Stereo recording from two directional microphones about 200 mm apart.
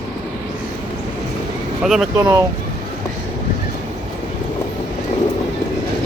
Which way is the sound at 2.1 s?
15° right (ahead or behind).